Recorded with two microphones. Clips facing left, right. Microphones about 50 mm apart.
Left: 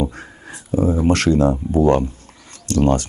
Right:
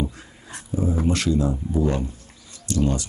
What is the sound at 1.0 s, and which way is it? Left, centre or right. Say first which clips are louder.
Speech: left 7 dB; left.